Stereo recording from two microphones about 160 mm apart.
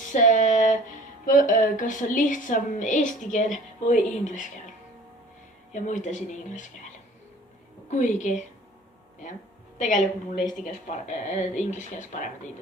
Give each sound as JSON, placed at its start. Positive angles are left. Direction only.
{"t": 0.1, "sound": "a sound", "side_deg": 50}
{"t": 1.2, "sound": "a woman's voice", "side_deg": 55}
{"t": 5.7, "sound": "speech", "side_deg": 50}
{"t": 9.7, "sound": "a woman's voice", "side_deg": 50}